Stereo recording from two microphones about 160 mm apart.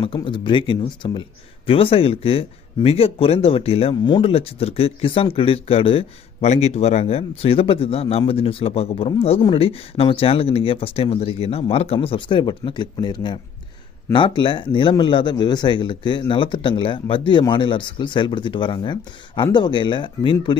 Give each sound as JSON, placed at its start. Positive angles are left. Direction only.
{"t": 0.0, "sound": "speech", "side_deg": 30}